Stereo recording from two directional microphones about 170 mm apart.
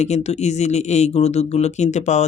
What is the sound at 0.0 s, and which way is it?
Speech, 40° left (ahead or behind).